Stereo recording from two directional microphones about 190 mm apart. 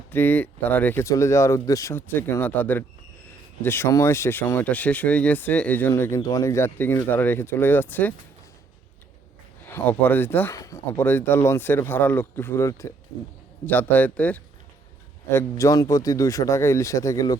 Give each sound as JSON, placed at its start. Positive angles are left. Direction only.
{"t": 0.1, "sound": "speech", "side_deg": 10}
{"t": 9.6, "sound": "speech", "side_deg": 10}